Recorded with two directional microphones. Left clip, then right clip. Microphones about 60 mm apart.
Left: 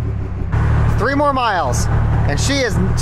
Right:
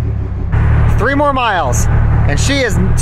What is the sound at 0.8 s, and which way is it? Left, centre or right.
Speech, centre.